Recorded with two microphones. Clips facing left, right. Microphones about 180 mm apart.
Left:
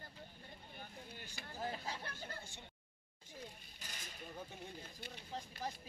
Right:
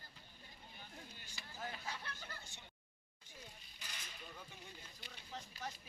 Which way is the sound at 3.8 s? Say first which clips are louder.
Left 2 dB; 45° left (ahead or behind).